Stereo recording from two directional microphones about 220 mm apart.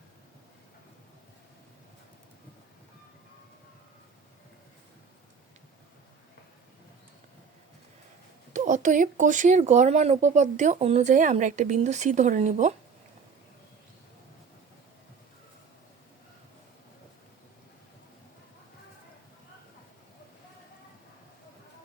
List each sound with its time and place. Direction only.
8.5 s speech: 35° right (ahead or behind)